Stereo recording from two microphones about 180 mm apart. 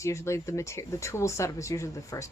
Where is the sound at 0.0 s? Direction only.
15° left (ahead or behind).